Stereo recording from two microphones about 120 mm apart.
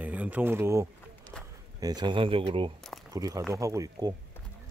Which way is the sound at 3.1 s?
30° right (ahead or behind).